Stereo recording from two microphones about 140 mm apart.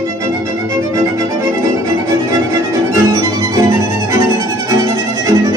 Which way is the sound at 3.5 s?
25° right (ahead or behind).